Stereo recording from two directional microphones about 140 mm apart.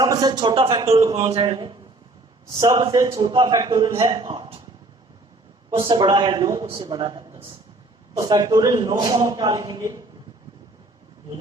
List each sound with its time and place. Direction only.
0.0 s a man's voice: 25° right (ahead or behind)
3.2 s a man's voice: 35° right (ahead or behind)
5.7 s a man's voice: 35° right (ahead or behind)